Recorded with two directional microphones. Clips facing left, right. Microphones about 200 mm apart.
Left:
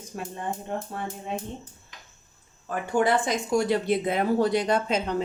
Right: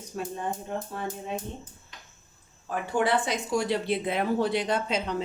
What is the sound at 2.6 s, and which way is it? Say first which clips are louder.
Speech: left 2 dB; 45° left (ahead or behind).